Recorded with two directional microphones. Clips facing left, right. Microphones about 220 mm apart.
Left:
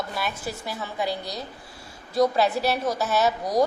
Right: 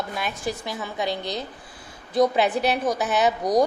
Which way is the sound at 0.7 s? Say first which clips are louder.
Right 1 dB; 20° right (ahead or behind).